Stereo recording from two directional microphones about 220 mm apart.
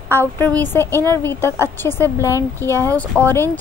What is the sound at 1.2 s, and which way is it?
A woman's voice, 10° left (ahead or behind).